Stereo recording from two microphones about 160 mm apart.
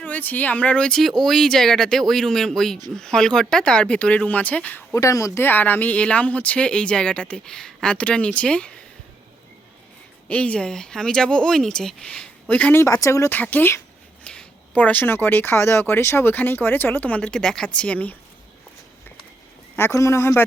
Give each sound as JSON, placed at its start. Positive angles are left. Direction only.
{"t": 0.0, "sound": "speech", "side_deg": 10}
{"t": 4.9, "sound": "speech", "side_deg": 20}
{"t": 10.2, "sound": "speech", "side_deg": 10}
{"t": 19.7, "sound": "speech", "side_deg": 15}